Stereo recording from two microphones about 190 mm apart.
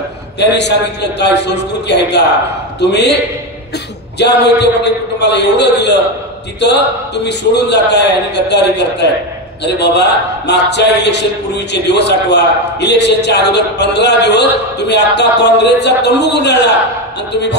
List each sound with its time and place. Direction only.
0.4 s a man's voice: 65° left (ahead or behind)
4.2 s a man's voice: 65° left (ahead or behind)
7.2 s a man's voice: 65° left (ahead or behind)